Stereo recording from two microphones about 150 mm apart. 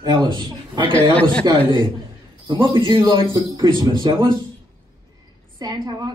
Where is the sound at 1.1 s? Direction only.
10° left (ahead or behind).